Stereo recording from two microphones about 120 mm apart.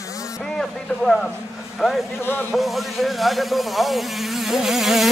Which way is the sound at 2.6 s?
Centre (ahead or behind).